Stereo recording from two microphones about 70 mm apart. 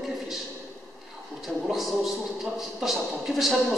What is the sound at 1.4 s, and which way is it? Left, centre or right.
Speech, centre.